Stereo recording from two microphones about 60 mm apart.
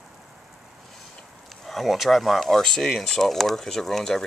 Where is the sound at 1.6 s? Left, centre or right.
Centre.